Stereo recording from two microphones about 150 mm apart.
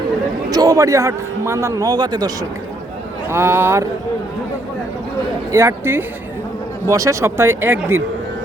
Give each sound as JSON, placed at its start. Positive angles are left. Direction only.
{"t": 0.5, "sound": "a man's voice", "side_deg": -25}
{"t": 3.2, "sound": "speech", "side_deg": -15}
{"t": 5.5, "sound": "speech", "side_deg": -20}